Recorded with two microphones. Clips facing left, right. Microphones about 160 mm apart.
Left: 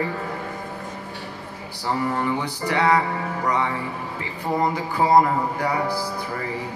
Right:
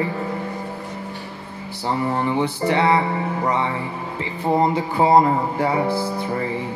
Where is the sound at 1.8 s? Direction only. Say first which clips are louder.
Right 2 dB; 20° right (ahead or behind).